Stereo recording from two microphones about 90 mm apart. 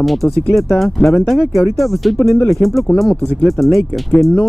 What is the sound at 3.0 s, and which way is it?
Speech, centre (ahead or behind).